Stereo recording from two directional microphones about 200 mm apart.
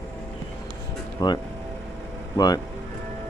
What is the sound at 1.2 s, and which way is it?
Speech, 20° left (ahead or behind).